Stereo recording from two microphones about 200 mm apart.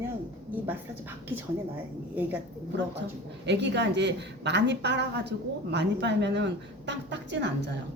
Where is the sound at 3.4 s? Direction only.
60° right (ahead or behind).